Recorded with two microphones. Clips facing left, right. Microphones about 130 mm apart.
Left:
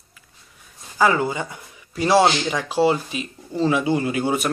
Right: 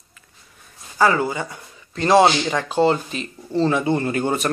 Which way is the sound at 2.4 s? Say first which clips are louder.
Right 1 dB; 5° left (ahead or behind).